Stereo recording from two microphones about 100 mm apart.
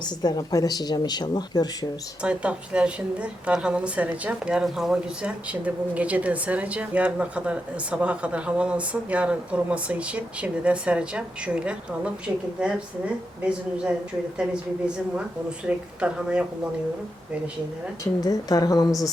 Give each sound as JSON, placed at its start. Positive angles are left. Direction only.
{"t": 0.2, "sound": "speech", "side_deg": 45}
{"t": 2.2, "sound": "a woman's voice", "side_deg": -10}
{"t": 18.2, "sound": "a woman's voice", "side_deg": 40}